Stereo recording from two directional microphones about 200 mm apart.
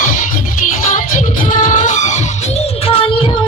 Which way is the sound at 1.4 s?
40° left (ahead or behind).